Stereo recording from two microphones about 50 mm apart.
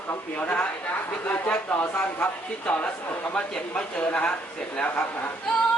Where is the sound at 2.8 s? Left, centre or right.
Left.